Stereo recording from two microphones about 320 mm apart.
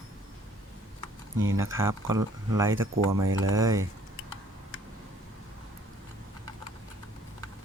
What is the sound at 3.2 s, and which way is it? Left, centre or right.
Speech, right.